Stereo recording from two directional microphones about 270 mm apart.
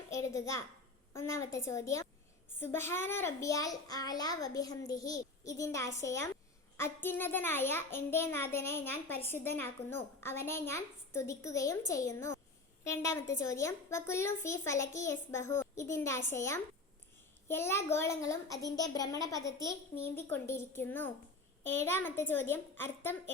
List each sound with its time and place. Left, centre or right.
0.1 s a child's voice: centre